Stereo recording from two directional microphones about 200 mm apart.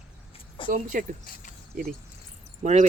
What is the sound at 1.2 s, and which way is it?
Speech, 45° left (ahead or behind).